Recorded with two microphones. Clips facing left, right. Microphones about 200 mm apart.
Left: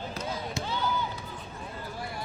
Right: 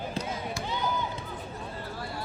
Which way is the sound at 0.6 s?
15° right (ahead or behind).